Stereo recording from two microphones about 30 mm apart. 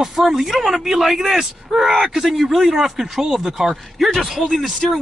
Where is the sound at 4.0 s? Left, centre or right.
Centre.